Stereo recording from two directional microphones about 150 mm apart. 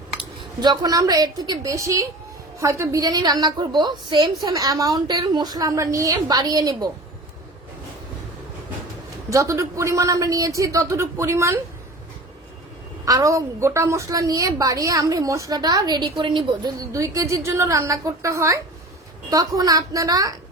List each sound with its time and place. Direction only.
0.2 s a woman's voice: 30° right (ahead or behind)
9.3 s a woman's voice: 20° right (ahead or behind)
13.1 s a woman's voice: 20° right (ahead or behind)